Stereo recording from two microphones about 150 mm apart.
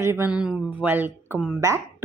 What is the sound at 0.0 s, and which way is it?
Speech, 15° right (ahead or behind).